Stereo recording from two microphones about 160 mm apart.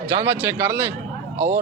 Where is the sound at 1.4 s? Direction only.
50° right (ahead or behind).